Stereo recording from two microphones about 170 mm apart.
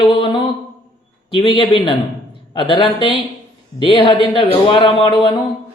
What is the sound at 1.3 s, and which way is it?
Speech, 30° left (ahead or behind).